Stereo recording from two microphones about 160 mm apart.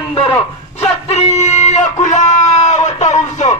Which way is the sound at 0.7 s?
40° left (ahead or behind).